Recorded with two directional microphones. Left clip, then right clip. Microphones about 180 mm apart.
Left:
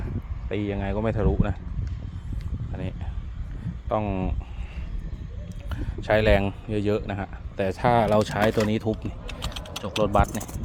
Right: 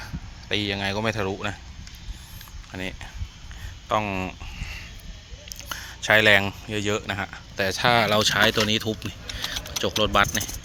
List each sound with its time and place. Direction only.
0.4 s speech: 5° left (ahead or behind)
3.8 s a sound: 10° left (ahead or behind)
6.7 s speech: 20° left (ahead or behind)
9.4 s speech: centre (ahead or behind)